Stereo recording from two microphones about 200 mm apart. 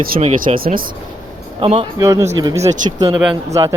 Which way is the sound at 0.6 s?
45° right (ahead or behind).